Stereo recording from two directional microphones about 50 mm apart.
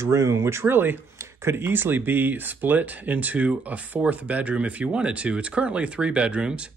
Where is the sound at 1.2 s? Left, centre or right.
Right.